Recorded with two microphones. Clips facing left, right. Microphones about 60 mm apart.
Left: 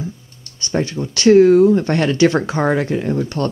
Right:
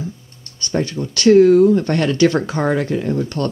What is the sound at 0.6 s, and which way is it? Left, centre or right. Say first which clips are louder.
Speech: even; centre.